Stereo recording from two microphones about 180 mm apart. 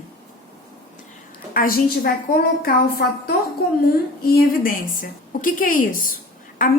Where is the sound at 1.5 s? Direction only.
50° left (ahead or behind).